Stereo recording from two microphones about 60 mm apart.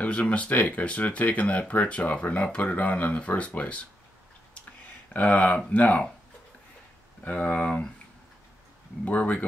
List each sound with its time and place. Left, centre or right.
0.0 s speech: left
5.1 s speech: left
7.2 s speech: left
9.0 s speech: left